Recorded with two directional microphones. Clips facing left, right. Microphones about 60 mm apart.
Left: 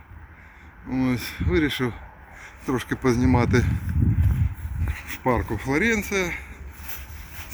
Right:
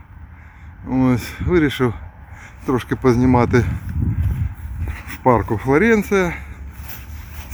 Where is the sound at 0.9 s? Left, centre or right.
Centre.